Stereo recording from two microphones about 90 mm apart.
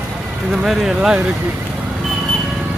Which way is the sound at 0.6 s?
5° right (ahead or behind).